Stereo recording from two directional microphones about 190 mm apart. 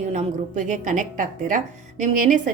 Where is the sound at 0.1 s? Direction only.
40° right (ahead or behind).